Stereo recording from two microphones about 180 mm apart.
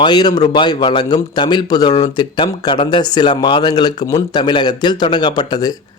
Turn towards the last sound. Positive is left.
turn(degrees=25)  # may be behind; listen again after turning